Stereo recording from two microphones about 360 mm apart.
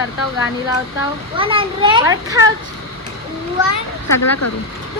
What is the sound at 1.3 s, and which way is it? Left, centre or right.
A child's voice, centre.